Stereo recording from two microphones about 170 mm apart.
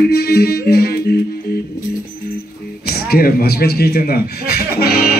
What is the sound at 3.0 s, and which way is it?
A man's voice, 65° left (ahead or behind).